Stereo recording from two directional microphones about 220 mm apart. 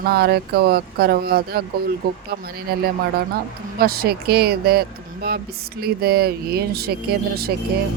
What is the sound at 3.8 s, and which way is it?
Speech, 45° right (ahead or behind).